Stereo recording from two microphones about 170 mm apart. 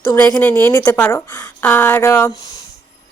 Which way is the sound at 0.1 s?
20° left (ahead or behind).